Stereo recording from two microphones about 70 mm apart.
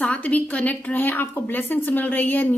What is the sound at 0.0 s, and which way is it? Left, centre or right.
A woman's voice, left.